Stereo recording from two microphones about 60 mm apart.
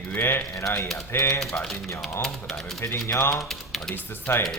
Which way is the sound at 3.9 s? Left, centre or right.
Left.